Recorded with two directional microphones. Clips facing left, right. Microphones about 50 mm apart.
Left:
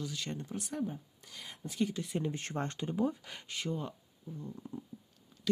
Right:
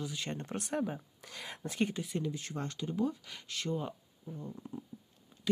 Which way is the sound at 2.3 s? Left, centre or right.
Left.